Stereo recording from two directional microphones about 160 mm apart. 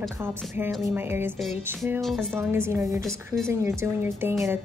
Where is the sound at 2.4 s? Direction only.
15° right (ahead or behind).